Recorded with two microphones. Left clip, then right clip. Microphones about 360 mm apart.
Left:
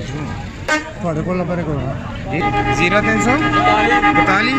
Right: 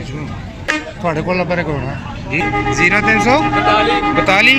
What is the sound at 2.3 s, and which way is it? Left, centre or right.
A man's voice, centre.